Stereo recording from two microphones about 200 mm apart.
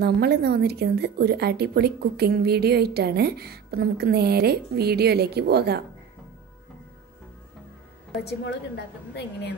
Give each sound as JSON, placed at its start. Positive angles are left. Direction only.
{"t": 0.0, "sound": "a woman's voice", "side_deg": -55}
{"t": 8.2, "sound": "a woman's voice", "side_deg": 55}